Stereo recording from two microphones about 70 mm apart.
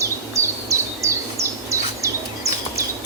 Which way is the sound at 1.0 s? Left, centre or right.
Right.